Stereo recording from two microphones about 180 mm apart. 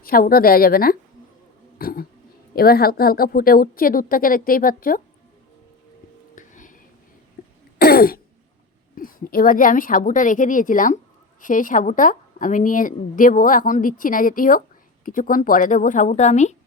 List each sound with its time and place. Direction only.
0.0 s a woman's voice: 55° left (ahead or behind)
6.3 s whispering: 45° left (ahead or behind)
7.4 s throat clearing: 60° left (ahead or behind)
9.0 s a woman's voice: 50° left (ahead or behind)